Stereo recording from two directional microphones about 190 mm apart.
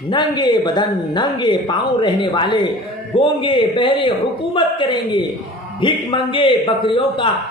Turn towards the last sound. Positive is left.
turn(degrees=25)  # may be behind; listen again after turning